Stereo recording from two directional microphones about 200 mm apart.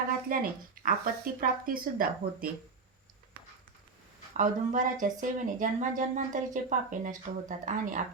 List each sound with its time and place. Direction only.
0.3 s speech: 45° right (ahead or behind)
4.4 s speech: 40° right (ahead or behind)